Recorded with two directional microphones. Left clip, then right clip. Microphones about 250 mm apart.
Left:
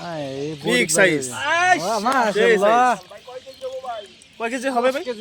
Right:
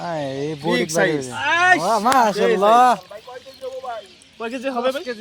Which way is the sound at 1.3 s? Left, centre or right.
Centre.